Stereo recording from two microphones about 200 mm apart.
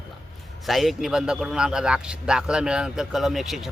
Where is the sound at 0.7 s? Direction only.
Centre (ahead or behind).